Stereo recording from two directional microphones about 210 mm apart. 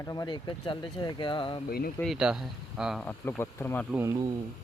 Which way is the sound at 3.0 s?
10° left (ahead or behind).